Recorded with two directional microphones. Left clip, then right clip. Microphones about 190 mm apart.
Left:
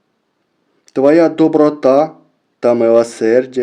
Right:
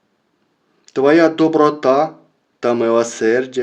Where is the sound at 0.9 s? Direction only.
50° left (ahead or behind).